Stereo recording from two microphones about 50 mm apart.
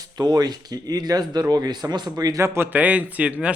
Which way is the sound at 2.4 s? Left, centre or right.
Right.